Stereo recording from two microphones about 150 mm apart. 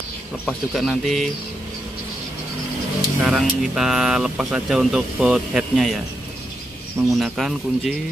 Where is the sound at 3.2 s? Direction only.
5° right (ahead or behind).